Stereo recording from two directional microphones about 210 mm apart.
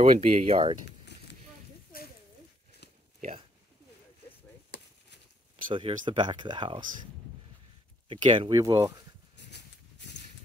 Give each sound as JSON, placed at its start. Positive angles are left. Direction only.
{"t": 0.0, "sound": "speech", "side_deg": -25}
{"t": 2.8, "sound": "a sound", "side_deg": 55}
{"t": 4.6, "sound": "chop", "side_deg": 55}
{"t": 5.7, "sound": "speech", "side_deg": -25}
{"t": 8.1, "sound": "speech", "side_deg": -25}
{"t": 9.5, "sound": "a sound", "side_deg": 55}